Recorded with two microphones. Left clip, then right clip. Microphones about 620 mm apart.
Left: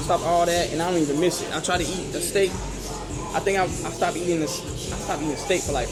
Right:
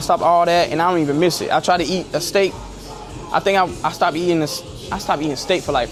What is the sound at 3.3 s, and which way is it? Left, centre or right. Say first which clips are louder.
Speech: right 7 dB; right.